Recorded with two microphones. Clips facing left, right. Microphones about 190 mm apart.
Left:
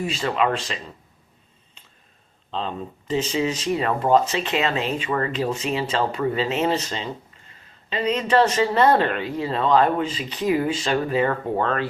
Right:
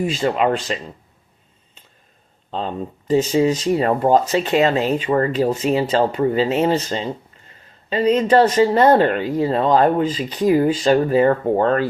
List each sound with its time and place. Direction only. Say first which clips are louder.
0.0 s speech: right 4 dB; 30° right (ahead or behind)
2.5 s speech: right 4 dB; 40° right (ahead or behind)